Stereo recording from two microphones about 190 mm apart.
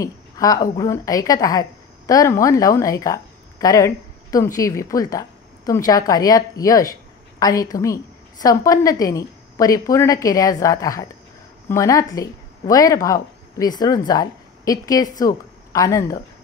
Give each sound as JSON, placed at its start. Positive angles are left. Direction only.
{"t": 0.0, "sound": "a woman's voice", "side_deg": 20}